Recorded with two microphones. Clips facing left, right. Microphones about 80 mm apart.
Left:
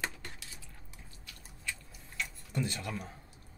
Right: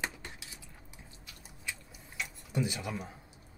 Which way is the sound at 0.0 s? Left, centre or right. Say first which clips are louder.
Right 1 dB; centre.